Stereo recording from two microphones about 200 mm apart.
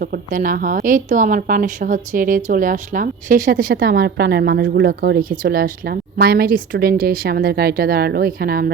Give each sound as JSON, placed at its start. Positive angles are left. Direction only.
{"t": 0.0, "sound": "a woman's voice", "side_deg": -45}